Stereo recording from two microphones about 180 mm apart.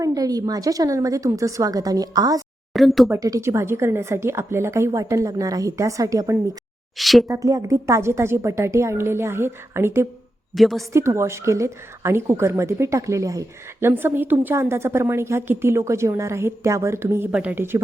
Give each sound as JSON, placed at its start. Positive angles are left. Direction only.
{"t": 0.0, "sound": "a woman's voice", "side_deg": -20}
{"t": 2.7, "sound": "speech", "side_deg": 0}
{"t": 3.1, "sound": "a woman's voice", "side_deg": -20}
{"t": 6.9, "sound": "speech", "side_deg": 0}
{"t": 7.3, "sound": "a woman's voice", "side_deg": -20}
{"t": 10.5, "sound": "speech", "side_deg": 0}
{"t": 10.9, "sound": "a woman's voice", "side_deg": -15}